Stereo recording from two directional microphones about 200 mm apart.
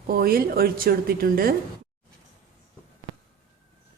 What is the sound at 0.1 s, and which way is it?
Speech, 50° right (ahead or behind).